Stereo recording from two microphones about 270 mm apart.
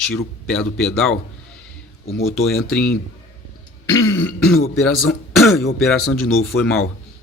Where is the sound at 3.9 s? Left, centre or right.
Centre.